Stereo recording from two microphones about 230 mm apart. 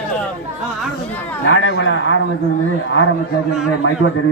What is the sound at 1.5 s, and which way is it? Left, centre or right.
Speech, left.